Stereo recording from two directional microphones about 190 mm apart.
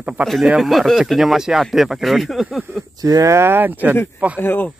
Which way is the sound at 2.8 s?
20° right (ahead or behind).